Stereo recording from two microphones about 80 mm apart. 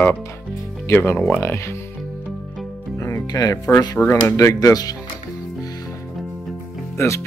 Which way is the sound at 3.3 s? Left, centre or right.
Left.